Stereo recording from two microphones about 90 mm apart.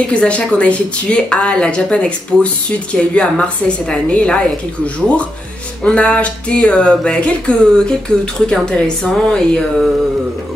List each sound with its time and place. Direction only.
0.1 s speech: 10° left (ahead or behind)
5.9 s speech: 15° left (ahead or behind)